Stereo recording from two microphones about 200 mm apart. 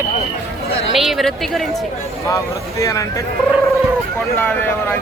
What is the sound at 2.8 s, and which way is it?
Speech, 15° left (ahead or behind).